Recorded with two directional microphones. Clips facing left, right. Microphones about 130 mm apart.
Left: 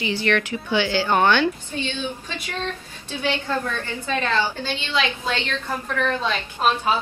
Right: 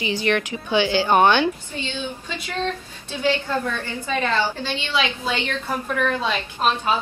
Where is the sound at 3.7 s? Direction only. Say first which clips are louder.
Even; 15° right (ahead or behind).